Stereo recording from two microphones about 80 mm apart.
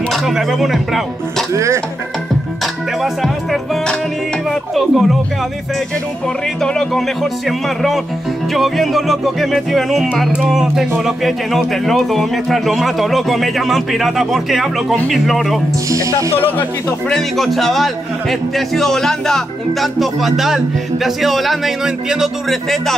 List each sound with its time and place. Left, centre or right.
0.1 s a man's voice: centre
1.5 s speech: right
2.6 s music: centre
4.5 s a man's voice: centre
6.6 s a man's voice: centre
15.9 s speech: right
16.3 s speech: left
17.1 s a man's voice: centre